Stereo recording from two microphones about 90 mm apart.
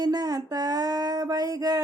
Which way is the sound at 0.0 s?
45° right (ahead or behind).